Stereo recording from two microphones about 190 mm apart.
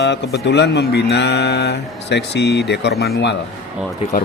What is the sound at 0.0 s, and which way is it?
Speech, 65° left (ahead or behind).